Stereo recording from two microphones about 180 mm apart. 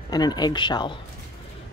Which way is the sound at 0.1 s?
20° left (ahead or behind).